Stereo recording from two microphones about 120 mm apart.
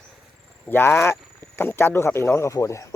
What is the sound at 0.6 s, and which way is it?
Speech, 20° left (ahead or behind).